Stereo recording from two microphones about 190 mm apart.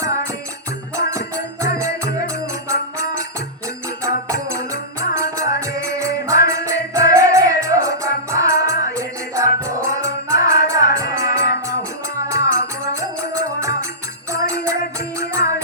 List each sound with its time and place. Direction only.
1.6 s music: 15° right (ahead or behind)
4.3 s music: 15° right (ahead or behind)